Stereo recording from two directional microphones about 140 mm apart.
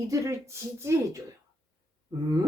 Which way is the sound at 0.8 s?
20° right (ahead or behind).